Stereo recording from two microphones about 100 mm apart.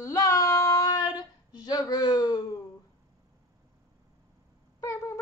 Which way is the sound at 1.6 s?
40° left (ahead or behind).